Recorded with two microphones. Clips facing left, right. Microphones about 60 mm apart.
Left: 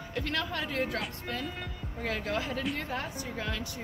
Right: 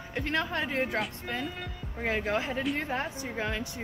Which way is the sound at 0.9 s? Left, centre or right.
Centre.